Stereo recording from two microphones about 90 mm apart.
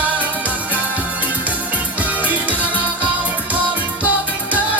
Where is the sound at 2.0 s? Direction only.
15° right (ahead or behind).